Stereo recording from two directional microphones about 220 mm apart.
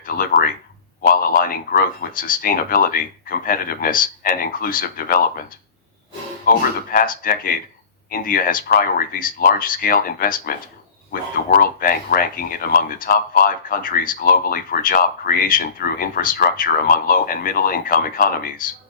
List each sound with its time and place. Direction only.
0.0 s speech: 40° left (ahead or behind)
6.5 s speech: 40° left (ahead or behind)
11.6 s speech: 40° left (ahead or behind)